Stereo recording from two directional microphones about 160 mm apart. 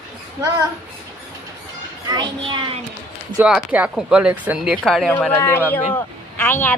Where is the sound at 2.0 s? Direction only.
30° right (ahead or behind).